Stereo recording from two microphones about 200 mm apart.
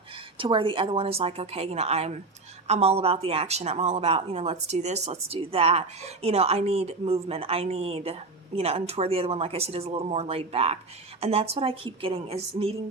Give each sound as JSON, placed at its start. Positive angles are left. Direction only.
{"t": 0.3, "sound": "speech", "side_deg": -25}